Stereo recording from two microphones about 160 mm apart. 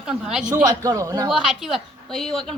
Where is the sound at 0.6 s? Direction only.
20° right (ahead or behind).